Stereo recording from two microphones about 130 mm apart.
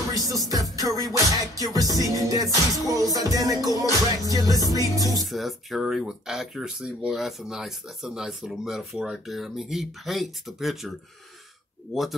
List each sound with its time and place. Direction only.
0.3 s music: 30° right (ahead or behind)
5.2 s speech: centre (ahead or behind)